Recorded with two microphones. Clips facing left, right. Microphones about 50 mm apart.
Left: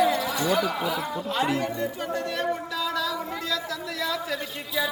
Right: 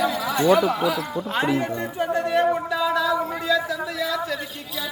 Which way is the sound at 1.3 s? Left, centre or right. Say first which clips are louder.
Right 3 dB; right.